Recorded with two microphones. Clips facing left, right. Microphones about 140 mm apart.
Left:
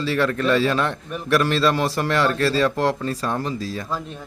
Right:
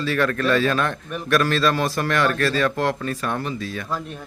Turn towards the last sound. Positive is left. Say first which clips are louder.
# left 1 dB
turn(degrees=35)  # may be behind; listen again after turning